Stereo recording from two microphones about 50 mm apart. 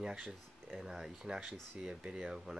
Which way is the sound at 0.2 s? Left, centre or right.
Centre.